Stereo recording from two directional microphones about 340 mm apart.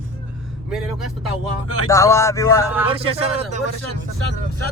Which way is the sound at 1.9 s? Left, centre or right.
Centre.